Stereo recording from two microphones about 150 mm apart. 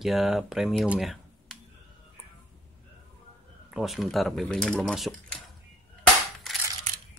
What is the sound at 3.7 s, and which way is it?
Speech, centre (ahead or behind).